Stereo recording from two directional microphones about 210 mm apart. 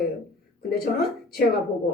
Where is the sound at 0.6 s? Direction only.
45° left (ahead or behind).